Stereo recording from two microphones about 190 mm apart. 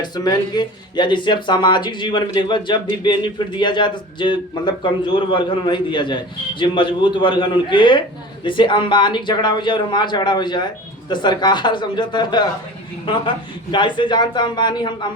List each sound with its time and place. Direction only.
0.0 s speech: 20° left (ahead or behind)